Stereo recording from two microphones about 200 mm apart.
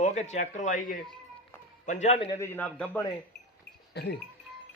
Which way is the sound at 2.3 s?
10° left (ahead or behind).